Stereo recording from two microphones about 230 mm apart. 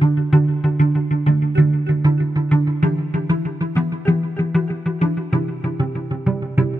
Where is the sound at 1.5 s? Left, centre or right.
Right.